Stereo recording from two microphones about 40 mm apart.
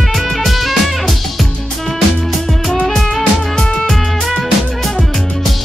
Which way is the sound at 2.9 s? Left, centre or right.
Centre.